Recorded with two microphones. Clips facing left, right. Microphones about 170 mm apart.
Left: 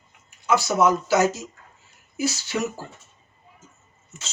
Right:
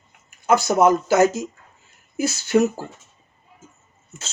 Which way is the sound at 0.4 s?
50° right (ahead or behind).